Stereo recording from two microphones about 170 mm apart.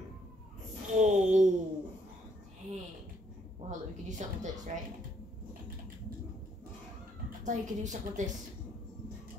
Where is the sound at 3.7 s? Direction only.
45° right (ahead or behind).